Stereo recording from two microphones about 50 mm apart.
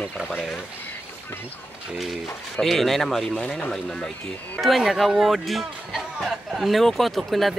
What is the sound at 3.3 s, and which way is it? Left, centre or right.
Speech, centre.